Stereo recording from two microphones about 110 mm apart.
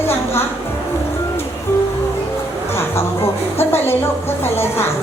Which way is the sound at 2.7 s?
20° left (ahead or behind).